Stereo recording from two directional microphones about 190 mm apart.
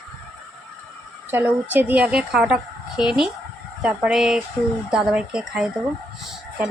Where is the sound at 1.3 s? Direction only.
10° right (ahead or behind).